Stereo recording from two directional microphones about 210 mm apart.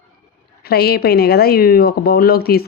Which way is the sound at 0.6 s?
50° left (ahead or behind).